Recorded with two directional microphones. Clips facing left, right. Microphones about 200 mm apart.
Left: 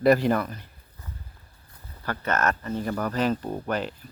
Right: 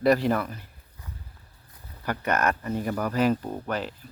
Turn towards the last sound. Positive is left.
turn(degrees=0)  # may be behind; listen again after turning